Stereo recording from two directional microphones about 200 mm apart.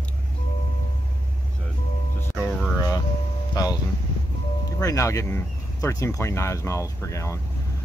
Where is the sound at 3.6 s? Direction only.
20° left (ahead or behind).